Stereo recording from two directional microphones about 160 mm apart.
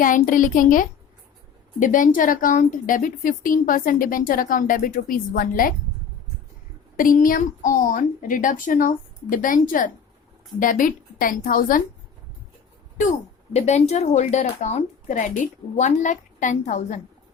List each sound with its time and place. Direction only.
0.0 s a woman's voice: 55° left (ahead or behind)
6.9 s a woman's voice: 60° left (ahead or behind)
13.0 s speech: 45° left (ahead or behind)